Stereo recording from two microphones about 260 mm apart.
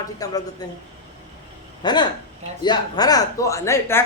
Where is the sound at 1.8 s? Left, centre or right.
Centre.